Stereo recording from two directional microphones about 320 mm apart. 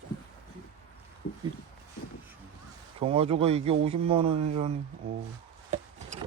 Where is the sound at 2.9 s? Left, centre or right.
Centre.